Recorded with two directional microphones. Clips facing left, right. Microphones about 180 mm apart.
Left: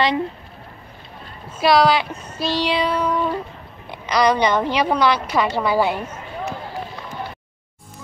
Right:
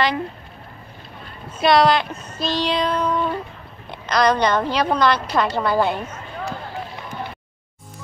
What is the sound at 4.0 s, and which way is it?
A woman's voice, 10° left (ahead or behind).